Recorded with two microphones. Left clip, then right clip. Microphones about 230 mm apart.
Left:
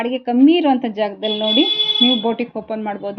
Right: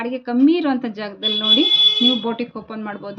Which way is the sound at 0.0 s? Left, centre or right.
Right.